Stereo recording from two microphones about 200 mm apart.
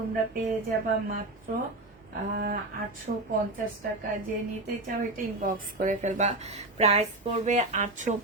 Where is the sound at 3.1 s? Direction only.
40° right (ahead or behind).